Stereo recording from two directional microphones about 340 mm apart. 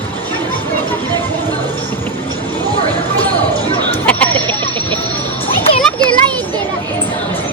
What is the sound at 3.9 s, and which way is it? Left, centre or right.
Chatter, centre.